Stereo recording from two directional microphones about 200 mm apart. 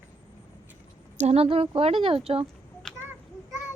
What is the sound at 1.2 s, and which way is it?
A woman's voice, 30° right (ahead or behind).